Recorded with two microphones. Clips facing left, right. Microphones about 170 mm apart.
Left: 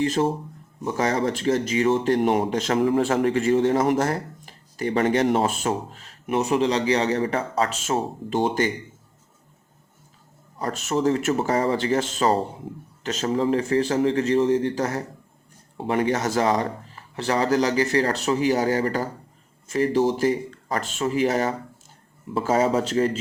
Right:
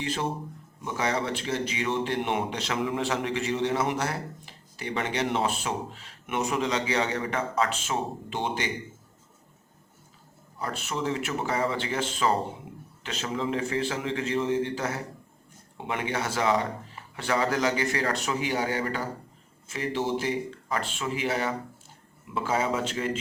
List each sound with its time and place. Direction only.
0.0 s a man's voice: 40° left (ahead or behind)
10.6 s a man's voice: 45° left (ahead or behind)